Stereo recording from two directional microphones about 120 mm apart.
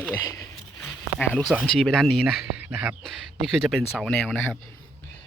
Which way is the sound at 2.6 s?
15° right (ahead or behind).